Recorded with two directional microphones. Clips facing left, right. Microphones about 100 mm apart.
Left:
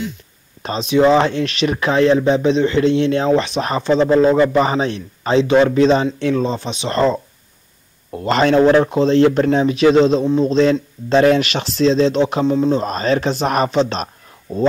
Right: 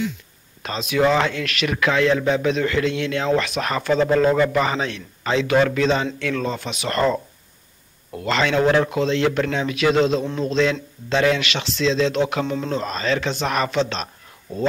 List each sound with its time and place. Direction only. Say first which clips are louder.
0.6 s speech: left 5 dB; 35° left (ahead or behind)
8.1 s speech: left 6 dB; 40° left (ahead or behind)
12.4 s speech: left 10 dB; 20° left (ahead or behind)
12.8 s speech: left 5 dB; 45° left (ahead or behind)